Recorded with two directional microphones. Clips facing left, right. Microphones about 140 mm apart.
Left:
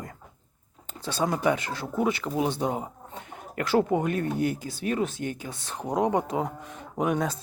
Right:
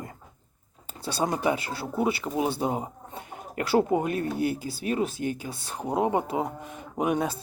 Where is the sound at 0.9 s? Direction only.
10° right (ahead or behind).